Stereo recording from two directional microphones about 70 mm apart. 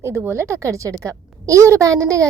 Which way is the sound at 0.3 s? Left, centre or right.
Right.